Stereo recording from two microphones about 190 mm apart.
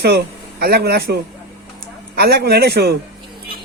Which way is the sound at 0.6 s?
55° right (ahead or behind).